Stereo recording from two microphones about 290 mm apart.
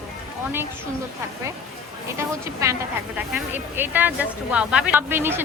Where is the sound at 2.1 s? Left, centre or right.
Centre.